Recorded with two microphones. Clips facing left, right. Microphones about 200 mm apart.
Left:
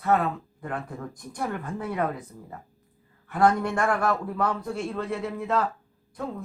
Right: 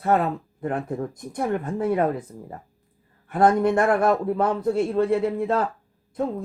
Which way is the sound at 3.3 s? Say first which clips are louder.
Right 4 dB; 20° right (ahead or behind).